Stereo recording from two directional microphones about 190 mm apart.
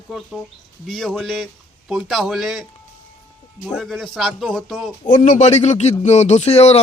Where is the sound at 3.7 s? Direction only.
Centre (ahead or behind).